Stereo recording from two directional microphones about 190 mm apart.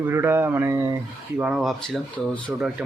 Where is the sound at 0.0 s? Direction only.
15° right (ahead or behind).